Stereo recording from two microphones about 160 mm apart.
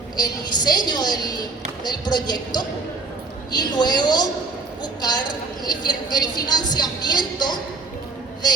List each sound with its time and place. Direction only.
0.2 s a woman's voice: 25° left (ahead or behind)